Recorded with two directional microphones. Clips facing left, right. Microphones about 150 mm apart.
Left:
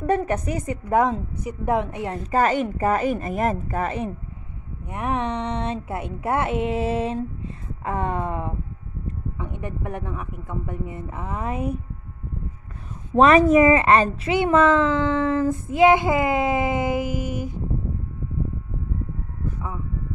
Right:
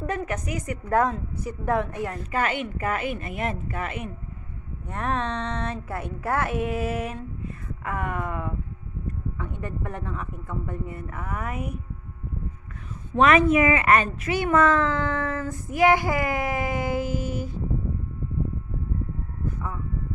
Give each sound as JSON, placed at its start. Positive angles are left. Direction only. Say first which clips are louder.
{"t": 0.0, "sound": "a woman's voice", "louder": "left 7 dB", "side_deg": 35}
{"t": 2.3, "sound": "a woman's voice", "louder": "left 7 dB", "side_deg": 40}
{"t": 4.8, "sound": "a woman's voice", "louder": "left 2 dB", "side_deg": 15}
{"t": 13.1, "sound": "a woman's voice", "louder": "left 4 dB", "side_deg": 35}